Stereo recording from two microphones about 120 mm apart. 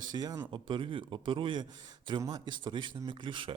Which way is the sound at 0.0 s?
35° right (ahead or behind).